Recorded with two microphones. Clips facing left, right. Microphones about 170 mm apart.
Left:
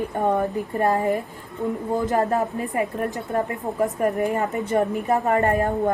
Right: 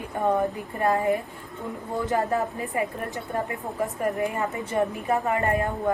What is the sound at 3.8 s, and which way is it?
A woman's voice, 45° left (ahead or behind).